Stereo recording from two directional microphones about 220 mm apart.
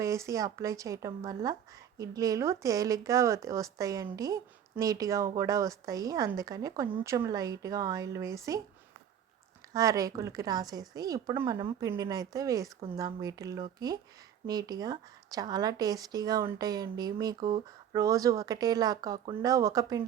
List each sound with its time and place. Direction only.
0.0 s speech: 15° right (ahead or behind)
9.7 s speech: 15° right (ahead or behind)